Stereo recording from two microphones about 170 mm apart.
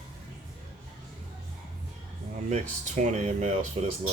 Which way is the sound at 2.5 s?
40° right (ahead or behind).